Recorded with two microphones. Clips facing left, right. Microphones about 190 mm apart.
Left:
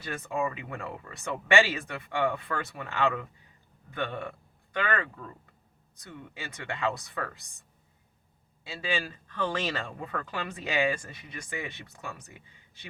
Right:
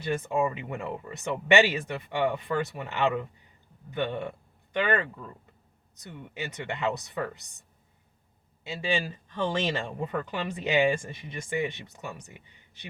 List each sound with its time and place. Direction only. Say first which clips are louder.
0.0 s speech: right 4 dB; 25° right (ahead or behind)
8.6 s speech: right 3 dB; 25° right (ahead or behind)